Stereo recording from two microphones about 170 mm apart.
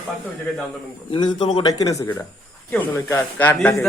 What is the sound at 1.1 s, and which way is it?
A man's voice, 25° left (ahead or behind).